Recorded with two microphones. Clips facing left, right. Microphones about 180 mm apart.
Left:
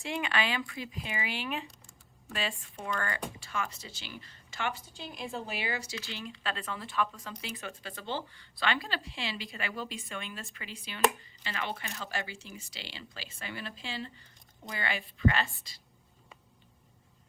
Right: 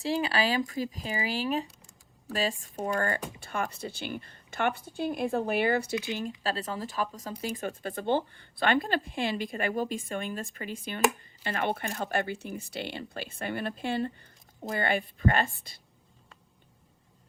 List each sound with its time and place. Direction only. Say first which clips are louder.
0.0 s speech: right 5 dB; 35° right (ahead or behind)
3.4 s a woman's voice: right 4 dB; 55° right (ahead or behind)
6.1 s speech: right 6 dB; 45° right (ahead or behind)